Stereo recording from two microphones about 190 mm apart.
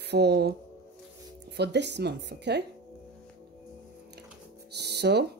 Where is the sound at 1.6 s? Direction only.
65° right (ahead or behind).